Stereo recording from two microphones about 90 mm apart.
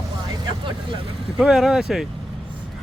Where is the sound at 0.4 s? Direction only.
70° right (ahead or behind).